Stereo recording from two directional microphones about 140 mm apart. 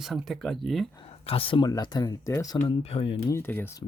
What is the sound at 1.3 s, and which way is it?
Speech, 40° left (ahead or behind).